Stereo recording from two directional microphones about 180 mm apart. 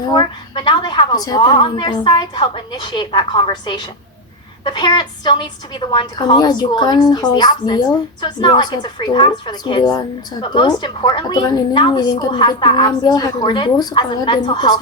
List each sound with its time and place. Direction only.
0.1 s a woman's voice: 25° left (ahead or behind)